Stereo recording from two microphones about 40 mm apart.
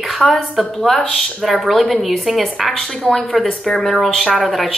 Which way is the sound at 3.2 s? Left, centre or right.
Centre.